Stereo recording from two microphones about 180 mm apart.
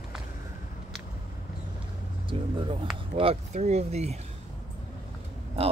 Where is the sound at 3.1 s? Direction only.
35° right (ahead or behind).